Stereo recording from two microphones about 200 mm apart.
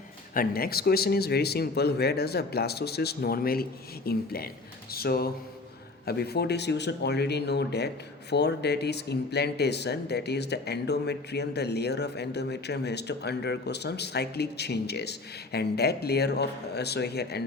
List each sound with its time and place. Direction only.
0.3 s speech: 50° left (ahead or behind)